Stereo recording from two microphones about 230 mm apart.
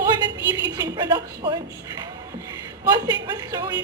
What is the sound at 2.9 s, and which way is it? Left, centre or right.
Speech, centre.